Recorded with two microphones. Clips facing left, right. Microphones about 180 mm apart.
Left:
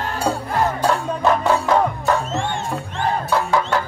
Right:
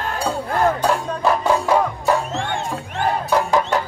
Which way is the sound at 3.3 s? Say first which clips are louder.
Right 2 dB; 15° right (ahead or behind).